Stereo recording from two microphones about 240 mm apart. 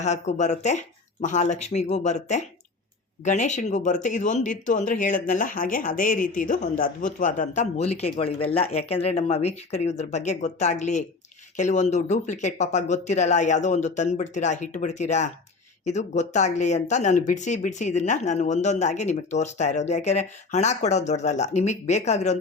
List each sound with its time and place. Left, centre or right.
0.0 s speech: left